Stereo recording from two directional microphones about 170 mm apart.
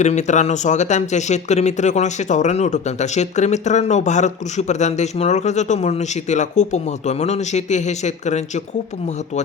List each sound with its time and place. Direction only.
0.0 s speech: 45° left (ahead or behind)